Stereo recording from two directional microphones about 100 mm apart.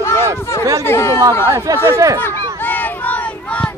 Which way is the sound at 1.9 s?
35° right (ahead or behind).